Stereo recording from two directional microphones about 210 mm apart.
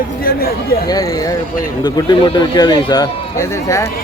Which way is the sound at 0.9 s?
20° left (ahead or behind).